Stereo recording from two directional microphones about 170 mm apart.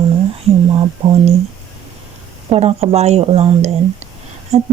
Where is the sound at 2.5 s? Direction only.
35° right (ahead or behind).